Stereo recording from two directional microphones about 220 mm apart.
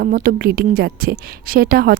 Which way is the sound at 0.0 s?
40° right (ahead or behind).